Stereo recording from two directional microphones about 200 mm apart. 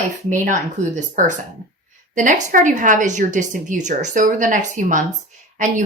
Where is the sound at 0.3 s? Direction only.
40° right (ahead or behind).